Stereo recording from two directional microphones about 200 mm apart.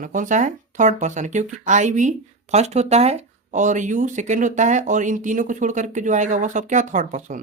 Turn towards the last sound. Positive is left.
turn(degrees=-40)  # may be behind; listen again after turning